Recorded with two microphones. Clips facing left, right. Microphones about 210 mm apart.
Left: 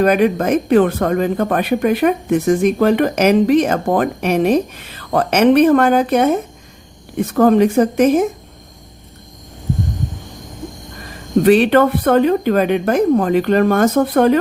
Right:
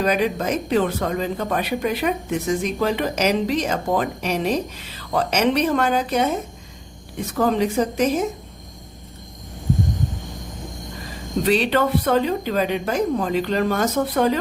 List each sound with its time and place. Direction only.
0.0 s speech: 55° left (ahead or behind)
11.4 s speech: 55° left (ahead or behind)